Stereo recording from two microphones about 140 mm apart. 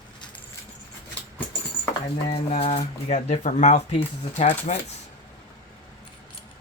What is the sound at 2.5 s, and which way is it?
Speech, 50° left (ahead or behind).